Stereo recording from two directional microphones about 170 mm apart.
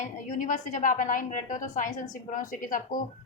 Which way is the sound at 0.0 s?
45° left (ahead or behind).